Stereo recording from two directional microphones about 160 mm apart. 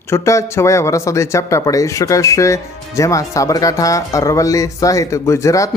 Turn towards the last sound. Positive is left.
turn(degrees=20)  # may be behind; listen again after turning